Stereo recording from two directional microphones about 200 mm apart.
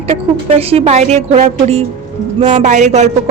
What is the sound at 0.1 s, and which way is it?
A woman's voice, 30° right (ahead or behind).